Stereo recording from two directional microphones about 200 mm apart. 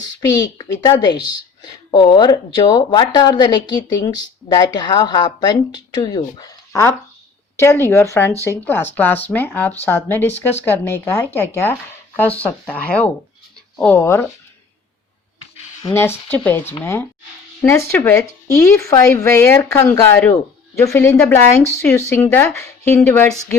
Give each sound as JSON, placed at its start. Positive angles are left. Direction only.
{"t": 0.0, "sound": "speech", "side_deg": 20}
{"t": 15.8, "sound": "speech", "side_deg": 10}